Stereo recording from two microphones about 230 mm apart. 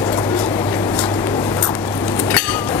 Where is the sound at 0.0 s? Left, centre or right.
Centre.